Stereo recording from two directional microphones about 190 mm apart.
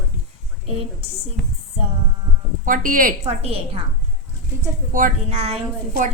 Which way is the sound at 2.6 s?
45° right (ahead or behind).